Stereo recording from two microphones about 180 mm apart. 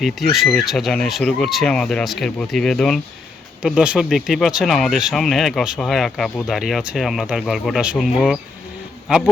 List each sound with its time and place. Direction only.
0.0 s a man's voice: centre (ahead or behind)